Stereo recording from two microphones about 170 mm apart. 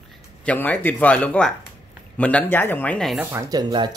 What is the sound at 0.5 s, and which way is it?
Speech, 10° left (ahead or behind).